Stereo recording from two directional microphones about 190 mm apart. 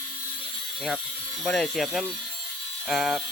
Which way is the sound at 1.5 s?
5° left (ahead or behind).